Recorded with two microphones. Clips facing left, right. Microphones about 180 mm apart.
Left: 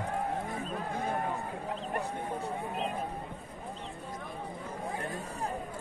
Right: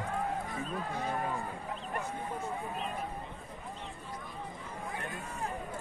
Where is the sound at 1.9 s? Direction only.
35° left (ahead or behind).